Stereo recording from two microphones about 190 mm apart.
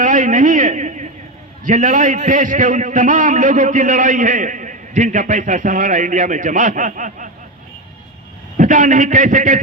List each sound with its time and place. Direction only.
0.0 s a sound: 45° right (ahead or behind)
1.6 s a man's voice: 45° right (ahead or behind)
8.5 s a man's voice: 45° right (ahead or behind)